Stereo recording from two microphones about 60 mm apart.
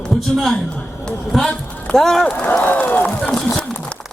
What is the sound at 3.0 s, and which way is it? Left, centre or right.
Speech, centre.